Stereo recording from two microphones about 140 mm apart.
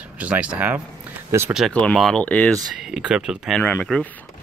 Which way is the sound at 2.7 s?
5° right (ahead or behind).